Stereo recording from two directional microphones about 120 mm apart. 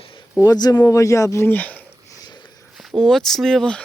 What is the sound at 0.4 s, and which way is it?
Speech, 35° left (ahead or behind).